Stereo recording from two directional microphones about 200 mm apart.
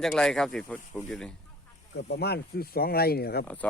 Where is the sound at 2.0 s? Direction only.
55° left (ahead or behind).